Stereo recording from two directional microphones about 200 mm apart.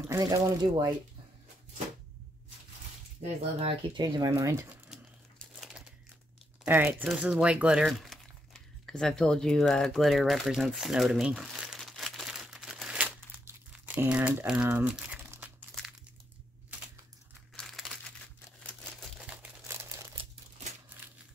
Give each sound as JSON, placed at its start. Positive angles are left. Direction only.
{"t": 0.1, "sound": "speech", "side_deg": -15}
{"t": 3.6, "sound": "speech", "side_deg": -25}
{"t": 4.8, "sound": "crumpling", "side_deg": 0}
{"t": 6.6, "sound": "speech", "side_deg": -10}
{"t": 17.6, "sound": "crumpling", "side_deg": 0}